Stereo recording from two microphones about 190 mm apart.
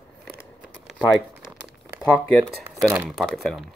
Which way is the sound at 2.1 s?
10° left (ahead or behind).